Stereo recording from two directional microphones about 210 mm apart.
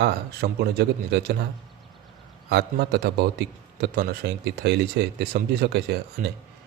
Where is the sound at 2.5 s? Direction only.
50° right (ahead or behind).